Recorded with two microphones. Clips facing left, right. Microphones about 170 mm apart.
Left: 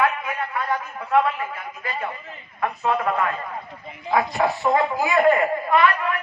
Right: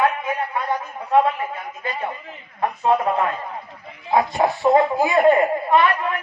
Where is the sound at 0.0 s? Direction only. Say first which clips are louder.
Right 2 dB; 30° right (ahead or behind).